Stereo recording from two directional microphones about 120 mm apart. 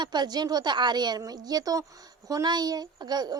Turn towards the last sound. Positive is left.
turn(degrees=-35)  # may be behind; listen again after turning